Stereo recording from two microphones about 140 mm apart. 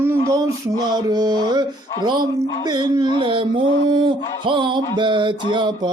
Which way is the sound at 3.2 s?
35° right (ahead or behind).